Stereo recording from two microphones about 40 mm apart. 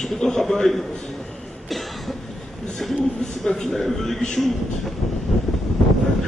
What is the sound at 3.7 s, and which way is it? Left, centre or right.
Speech, centre.